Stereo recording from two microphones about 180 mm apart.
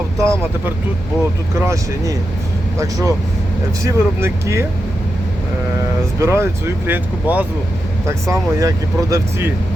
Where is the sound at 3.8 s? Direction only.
15° right (ahead or behind).